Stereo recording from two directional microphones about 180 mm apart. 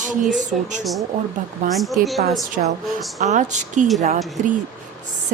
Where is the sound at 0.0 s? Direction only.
45° right (ahead or behind).